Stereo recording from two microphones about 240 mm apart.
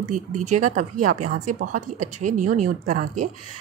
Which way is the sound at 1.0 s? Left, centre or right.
Right.